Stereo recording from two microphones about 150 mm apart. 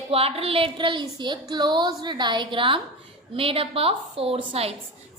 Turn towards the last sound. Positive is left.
turn(degrees=-40)  # may be behind; listen again after turning